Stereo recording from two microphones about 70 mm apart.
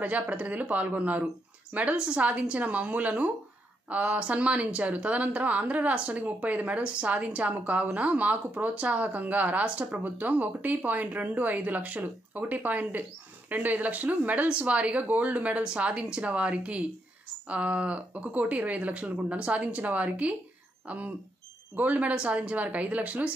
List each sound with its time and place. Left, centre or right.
0.0 s a woman's voice: right